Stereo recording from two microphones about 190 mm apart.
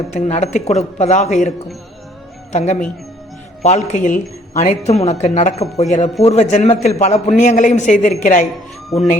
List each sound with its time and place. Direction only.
0.1 s a man's voice: 40° left (ahead or behind)